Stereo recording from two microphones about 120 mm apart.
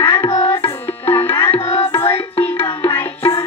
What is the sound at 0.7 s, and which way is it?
Music, 20° left (ahead or behind).